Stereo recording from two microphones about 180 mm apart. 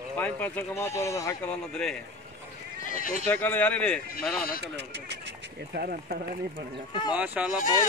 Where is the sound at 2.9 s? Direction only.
50° left (ahead or behind).